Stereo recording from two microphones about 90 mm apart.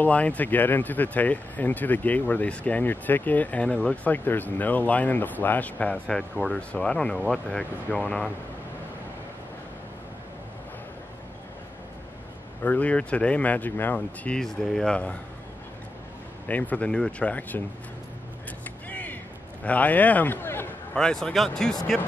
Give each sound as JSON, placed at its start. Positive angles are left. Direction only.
{"t": 0.0, "sound": "speech", "side_deg": 15}
{"t": 12.6, "sound": "speech", "side_deg": 15}
{"t": 14.4, "sound": "speech", "side_deg": 5}
{"t": 16.4, "sound": "speech", "side_deg": 15}
{"t": 18.9, "sound": "music", "side_deg": 20}
{"t": 19.6, "sound": "a man's voice", "side_deg": 15}
{"t": 20.9, "sound": "speech", "side_deg": 5}